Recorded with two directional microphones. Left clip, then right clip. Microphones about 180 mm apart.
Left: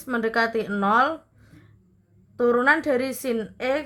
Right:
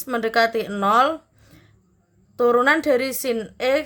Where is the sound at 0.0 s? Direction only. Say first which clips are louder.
Right 4 dB; 40° right (ahead or behind).